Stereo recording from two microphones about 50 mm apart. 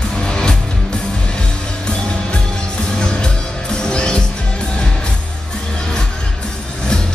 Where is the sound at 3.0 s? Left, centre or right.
Centre.